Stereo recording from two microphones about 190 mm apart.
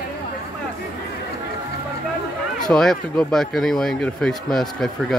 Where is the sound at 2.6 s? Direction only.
Centre (ahead or behind).